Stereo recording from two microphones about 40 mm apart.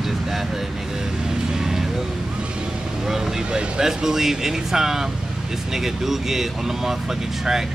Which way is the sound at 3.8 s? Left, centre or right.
Centre.